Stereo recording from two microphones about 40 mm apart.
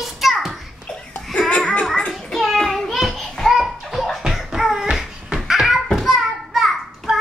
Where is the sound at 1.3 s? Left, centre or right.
Centre.